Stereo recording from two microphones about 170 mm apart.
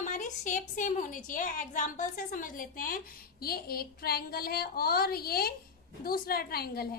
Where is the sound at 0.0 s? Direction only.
45° left (ahead or behind).